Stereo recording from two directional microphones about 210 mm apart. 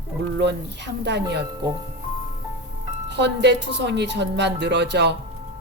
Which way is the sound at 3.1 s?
55° right (ahead or behind).